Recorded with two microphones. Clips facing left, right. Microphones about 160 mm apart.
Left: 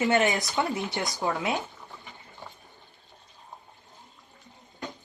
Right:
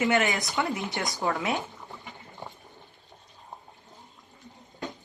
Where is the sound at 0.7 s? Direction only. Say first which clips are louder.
Left 1 dB; 20° right (ahead or behind).